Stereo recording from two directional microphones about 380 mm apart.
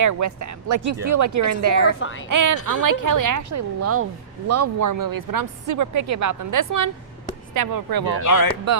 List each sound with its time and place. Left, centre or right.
0.0 s speech: right
2.0 s a woman's voice: left
2.3 s speech: right
8.2 s speech: left